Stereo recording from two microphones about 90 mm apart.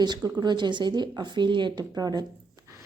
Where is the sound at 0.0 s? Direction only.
55° right (ahead or behind).